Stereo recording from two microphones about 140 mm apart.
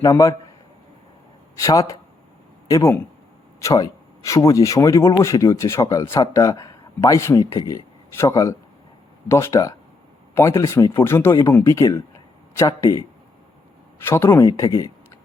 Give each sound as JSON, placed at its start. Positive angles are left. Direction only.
{"t": 0.0, "sound": "speech", "side_deg": 25}
{"t": 1.5, "sound": "speech", "side_deg": 25}
{"t": 14.0, "sound": "speech", "side_deg": 20}